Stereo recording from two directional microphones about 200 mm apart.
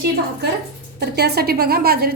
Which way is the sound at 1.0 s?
55° right (ahead or behind).